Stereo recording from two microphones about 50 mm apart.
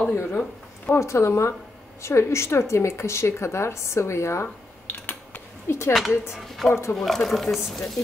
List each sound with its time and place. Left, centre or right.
0.0 s speech: left
0.9 s a woman's voice: left
4.8 s a sound: left
5.7 s a woman's voice: left
7.0 s speech: centre